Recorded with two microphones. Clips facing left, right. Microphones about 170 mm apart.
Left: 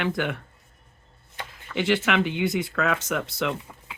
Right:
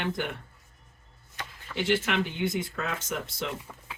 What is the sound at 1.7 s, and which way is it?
Speech, 90° left.